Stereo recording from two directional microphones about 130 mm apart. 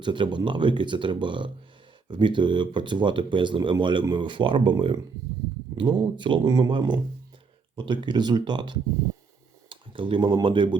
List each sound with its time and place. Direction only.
0.0 s speech: 35° right (ahead or behind)